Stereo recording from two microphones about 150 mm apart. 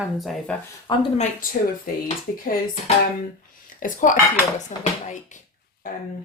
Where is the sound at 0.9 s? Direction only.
30° left (ahead or behind).